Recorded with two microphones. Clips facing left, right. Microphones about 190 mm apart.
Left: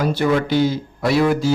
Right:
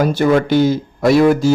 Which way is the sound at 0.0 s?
45° right (ahead or behind).